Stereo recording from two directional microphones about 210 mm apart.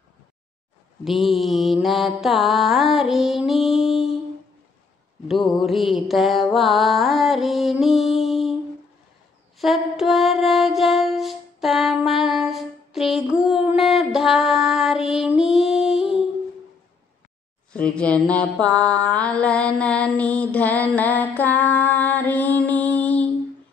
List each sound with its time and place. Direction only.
1.0 s mantra: centre (ahead or behind)
5.3 s mantra: centre (ahead or behind)
9.6 s music: centre (ahead or behind)
17.7 s mantra: 5° left (ahead or behind)